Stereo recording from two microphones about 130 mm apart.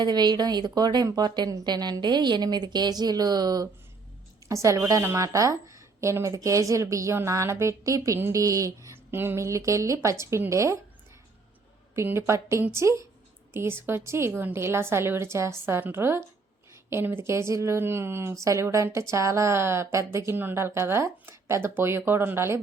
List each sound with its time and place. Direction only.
0.0 s a woman's voice: 35° right (ahead or behind)
11.9 s speech: 20° right (ahead or behind)